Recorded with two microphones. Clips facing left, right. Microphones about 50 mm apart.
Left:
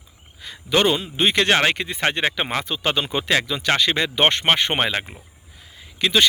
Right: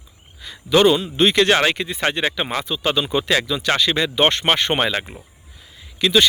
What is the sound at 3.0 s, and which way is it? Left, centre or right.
Speech, left.